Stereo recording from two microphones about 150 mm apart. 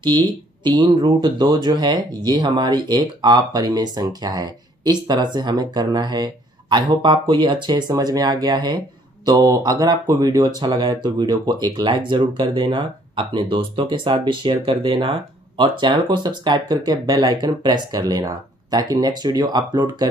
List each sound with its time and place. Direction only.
0.0 s speech: 30° right (ahead or behind)